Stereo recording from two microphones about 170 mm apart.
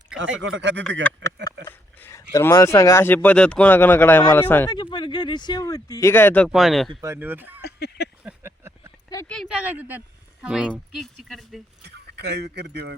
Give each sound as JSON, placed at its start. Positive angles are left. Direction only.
{"t": 0.2, "sound": "speech", "side_deg": -90}
{"t": 1.2, "sound": "a sound", "side_deg": -90}
{"t": 2.0, "sound": "speech", "side_deg": 15}
{"t": 4.7, "sound": "speech", "side_deg": 25}
{"t": 6.5, "sound": "speech", "side_deg": 0}
{"t": 7.0, "sound": "speech", "side_deg": -15}
{"t": 7.6, "sound": "a sound", "side_deg": 75}
{"t": 8.2, "sound": "a sound", "side_deg": -10}
{"t": 9.2, "sound": "speech", "side_deg": 5}
{"t": 9.5, "sound": "speech", "side_deg": -10}
{"t": 11.8, "sound": "speech", "side_deg": -75}